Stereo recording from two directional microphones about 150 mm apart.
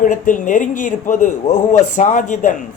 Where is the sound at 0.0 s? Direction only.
60° left (ahead or behind).